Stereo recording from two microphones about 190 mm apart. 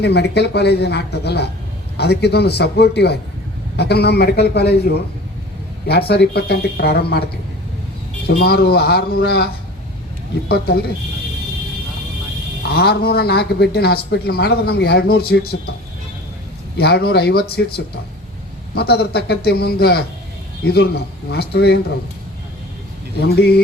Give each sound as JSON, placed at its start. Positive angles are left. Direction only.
{"t": 0.0, "sound": "speech", "side_deg": 60}
{"t": 8.4, "sound": "speech", "side_deg": 55}
{"t": 10.5, "sound": "speech", "side_deg": 55}
{"t": 12.7, "sound": "speech", "side_deg": 55}
{"t": 16.7, "sound": "speech", "side_deg": 55}
{"t": 23.2, "sound": "speech", "side_deg": 55}